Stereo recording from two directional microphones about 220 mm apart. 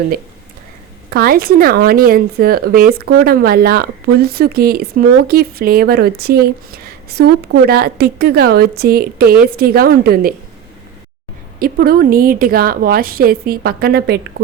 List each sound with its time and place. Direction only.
1.1 s speech: 45° right (ahead or behind)
11.6 s speech: 40° right (ahead or behind)